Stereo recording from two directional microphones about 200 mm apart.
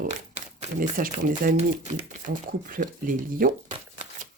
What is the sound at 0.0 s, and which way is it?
Crumpling, 40° right (ahead or behind).